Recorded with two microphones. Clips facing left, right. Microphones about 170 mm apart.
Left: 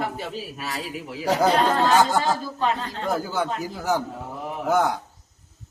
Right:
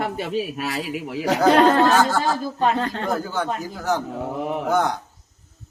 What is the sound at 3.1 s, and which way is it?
A man's voice, 10° left (ahead or behind).